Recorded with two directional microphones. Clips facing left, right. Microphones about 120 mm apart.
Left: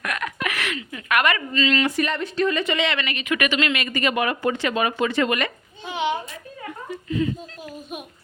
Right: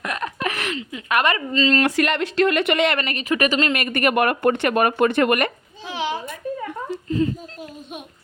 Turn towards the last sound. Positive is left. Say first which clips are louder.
# right 2 dB
turn(degrees=-35)  # may be behind; listen again after turning